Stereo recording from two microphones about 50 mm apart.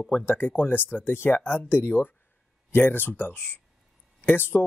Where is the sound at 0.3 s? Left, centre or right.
Left.